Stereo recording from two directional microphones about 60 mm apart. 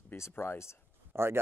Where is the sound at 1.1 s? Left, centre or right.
Right.